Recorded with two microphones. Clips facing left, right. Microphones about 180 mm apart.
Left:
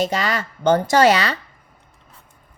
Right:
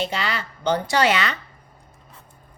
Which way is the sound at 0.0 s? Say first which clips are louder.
Left 5 dB; 45° left (ahead or behind).